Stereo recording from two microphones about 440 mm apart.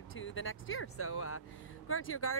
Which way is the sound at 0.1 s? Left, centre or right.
Left.